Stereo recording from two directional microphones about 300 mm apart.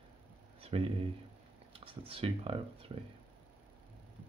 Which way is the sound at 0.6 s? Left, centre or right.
Centre.